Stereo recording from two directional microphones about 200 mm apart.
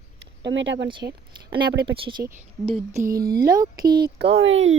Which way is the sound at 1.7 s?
60° right (ahead or behind).